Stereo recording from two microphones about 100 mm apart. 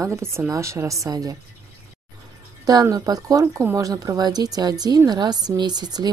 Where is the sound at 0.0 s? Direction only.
25° right (ahead or behind).